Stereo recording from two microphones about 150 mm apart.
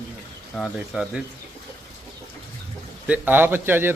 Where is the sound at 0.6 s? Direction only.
5° right (ahead or behind).